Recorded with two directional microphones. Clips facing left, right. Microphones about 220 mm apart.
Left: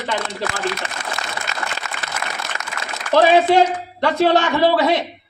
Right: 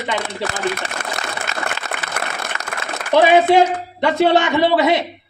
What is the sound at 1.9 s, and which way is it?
Applause, 55° right (ahead or behind).